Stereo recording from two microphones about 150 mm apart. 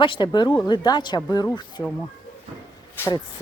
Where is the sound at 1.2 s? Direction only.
15° left (ahead or behind).